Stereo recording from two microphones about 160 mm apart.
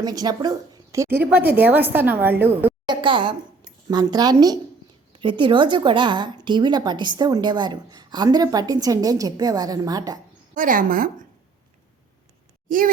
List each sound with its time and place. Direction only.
0.0 s a woman's voice: 25° right (ahead or behind)
2.8 s a woman's voice: 30° right (ahead or behind)
10.5 s a woman's voice: 55° right (ahead or behind)
12.6 s speech: 60° right (ahead or behind)